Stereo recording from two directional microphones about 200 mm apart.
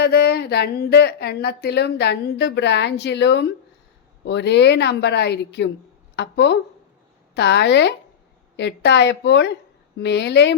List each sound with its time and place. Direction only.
0.0 s a woman's voice: 55° left (ahead or behind)